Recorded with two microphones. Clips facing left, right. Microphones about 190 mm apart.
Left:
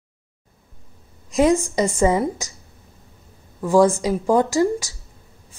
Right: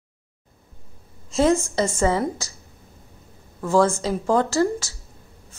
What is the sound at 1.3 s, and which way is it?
A woman's voice, 15° left (ahead or behind).